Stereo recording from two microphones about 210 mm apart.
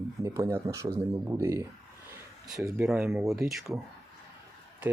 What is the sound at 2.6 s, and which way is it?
Speech, 5° right (ahead or behind).